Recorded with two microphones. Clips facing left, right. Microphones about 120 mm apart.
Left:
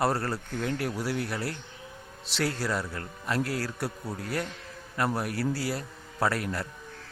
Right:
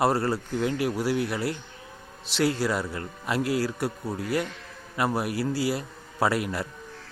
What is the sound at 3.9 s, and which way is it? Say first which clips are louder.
Speech: right 4 dB; 20° right (ahead or behind).